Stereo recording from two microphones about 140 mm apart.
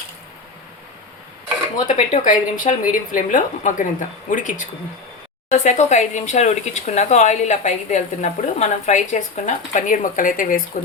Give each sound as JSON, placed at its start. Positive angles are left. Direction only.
{"t": 1.9, "sound": "a woman's voice", "side_deg": 65}